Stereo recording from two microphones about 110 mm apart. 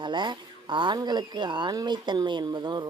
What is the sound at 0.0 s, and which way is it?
Speech, 45° right (ahead or behind).